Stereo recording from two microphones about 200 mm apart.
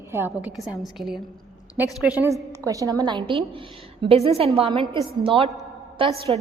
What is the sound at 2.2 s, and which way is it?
A woman's voice, 15° right (ahead or behind).